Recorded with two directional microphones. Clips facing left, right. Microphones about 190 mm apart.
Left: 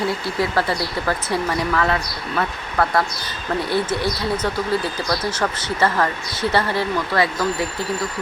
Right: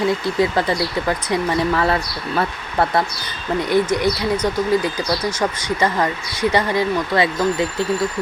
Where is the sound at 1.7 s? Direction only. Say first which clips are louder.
Right 2 dB; 30° right (ahead or behind).